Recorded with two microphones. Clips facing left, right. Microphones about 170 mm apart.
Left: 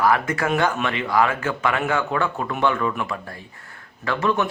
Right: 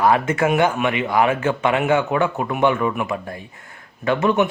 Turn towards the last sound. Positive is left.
turn(degrees=-20)  # may be behind; listen again after turning